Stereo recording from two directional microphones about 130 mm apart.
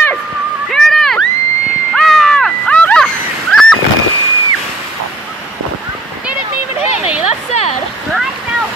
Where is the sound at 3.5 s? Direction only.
5° left (ahead or behind).